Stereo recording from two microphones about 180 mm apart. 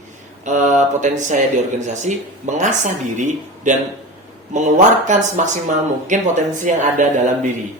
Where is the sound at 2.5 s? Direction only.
40° right (ahead or behind).